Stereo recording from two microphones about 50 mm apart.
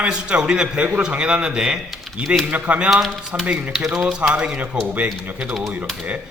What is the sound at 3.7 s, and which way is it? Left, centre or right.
Speech, centre.